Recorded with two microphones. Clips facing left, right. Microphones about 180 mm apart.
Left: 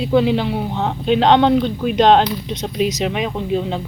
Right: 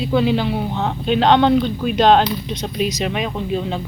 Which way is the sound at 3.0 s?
15° left (ahead or behind).